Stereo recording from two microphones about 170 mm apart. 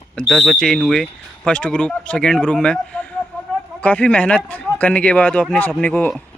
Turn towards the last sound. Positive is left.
turn(degrees=5)  # may be behind; listen again after turning